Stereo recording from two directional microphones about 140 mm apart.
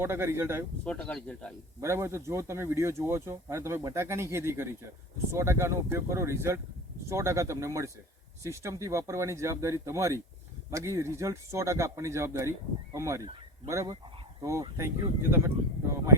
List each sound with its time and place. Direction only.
0.0 s speech: 15° right (ahead or behind)
0.9 s speech: 5° left (ahead or behind)
1.8 s speech: 20° right (ahead or behind)